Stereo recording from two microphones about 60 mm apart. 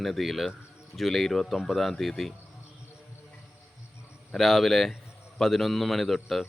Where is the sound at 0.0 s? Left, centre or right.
Centre.